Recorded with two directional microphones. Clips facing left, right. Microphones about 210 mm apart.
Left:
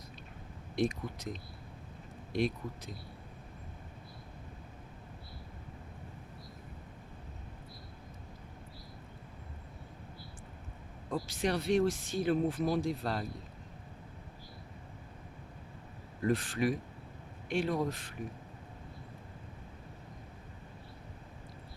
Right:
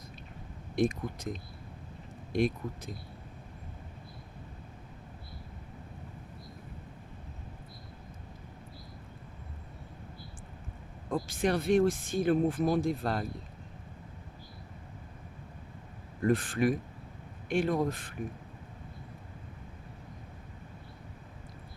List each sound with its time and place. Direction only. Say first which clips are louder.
0.8 s speech: right 3 dB; 50° right (ahead or behind)
11.1 s speech: right 3 dB; 50° right (ahead or behind)
16.2 s speech: right 3 dB; 50° right (ahead or behind)